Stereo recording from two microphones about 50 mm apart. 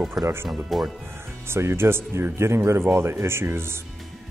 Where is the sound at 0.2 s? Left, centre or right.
Right.